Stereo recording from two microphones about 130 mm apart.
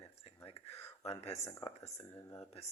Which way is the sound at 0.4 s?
50° left (ahead or behind).